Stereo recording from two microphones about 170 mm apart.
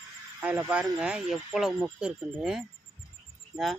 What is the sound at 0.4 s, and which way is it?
Speech, 15° right (ahead or behind).